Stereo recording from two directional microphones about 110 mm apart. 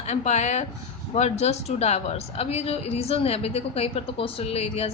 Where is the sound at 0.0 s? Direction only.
90° left.